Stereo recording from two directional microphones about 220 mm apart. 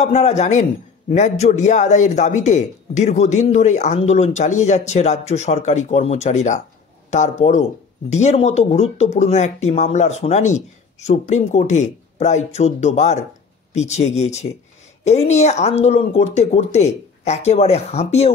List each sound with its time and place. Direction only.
0.0 s speech: 30° left (ahead or behind)